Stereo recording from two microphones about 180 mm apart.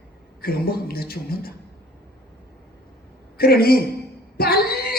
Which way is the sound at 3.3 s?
60° left (ahead or behind).